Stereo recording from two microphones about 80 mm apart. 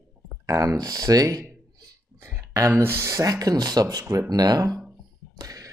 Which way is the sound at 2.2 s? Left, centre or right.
Right.